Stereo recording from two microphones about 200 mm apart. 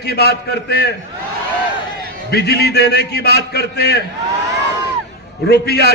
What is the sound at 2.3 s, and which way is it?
A man's voice, 55° left (ahead or behind).